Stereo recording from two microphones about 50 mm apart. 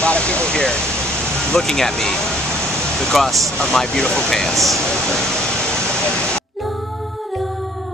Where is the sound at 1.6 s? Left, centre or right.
Centre.